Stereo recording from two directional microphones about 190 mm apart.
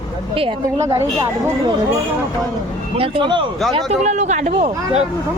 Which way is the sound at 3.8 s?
35° right (ahead or behind).